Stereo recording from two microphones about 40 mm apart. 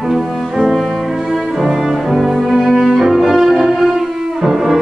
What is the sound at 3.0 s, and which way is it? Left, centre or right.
Cello, centre.